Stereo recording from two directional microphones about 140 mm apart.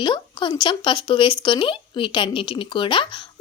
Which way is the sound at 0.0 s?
35° left (ahead or behind).